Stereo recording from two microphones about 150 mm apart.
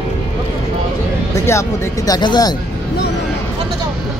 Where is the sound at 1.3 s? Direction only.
20° left (ahead or behind).